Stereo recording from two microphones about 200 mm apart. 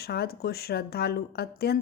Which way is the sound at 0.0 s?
50° left (ahead or behind).